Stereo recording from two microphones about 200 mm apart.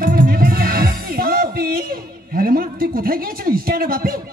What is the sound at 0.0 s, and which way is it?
Music, 45° right (ahead or behind).